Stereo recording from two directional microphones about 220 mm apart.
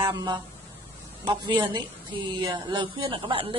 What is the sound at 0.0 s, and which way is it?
Speech, 15° right (ahead or behind).